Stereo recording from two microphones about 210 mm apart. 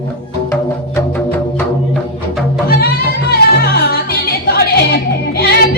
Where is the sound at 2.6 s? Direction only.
45° left (ahead or behind).